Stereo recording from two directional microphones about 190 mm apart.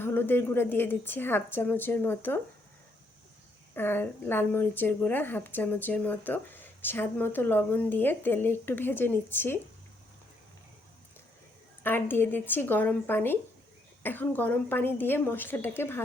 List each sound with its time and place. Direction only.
0.0 s a woman's voice: 10° left (ahead or behind)
3.8 s a woman's voice: 10° left (ahead or behind)
11.8 s a woman's voice: 10° left (ahead or behind)